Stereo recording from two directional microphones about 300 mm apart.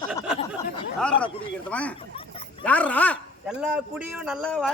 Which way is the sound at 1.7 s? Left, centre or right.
Centre.